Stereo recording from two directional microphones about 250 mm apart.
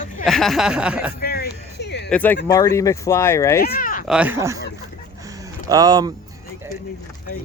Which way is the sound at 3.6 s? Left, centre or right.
Left.